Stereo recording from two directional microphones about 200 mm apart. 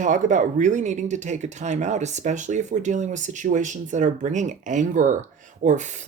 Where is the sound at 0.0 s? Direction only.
40° right (ahead or behind).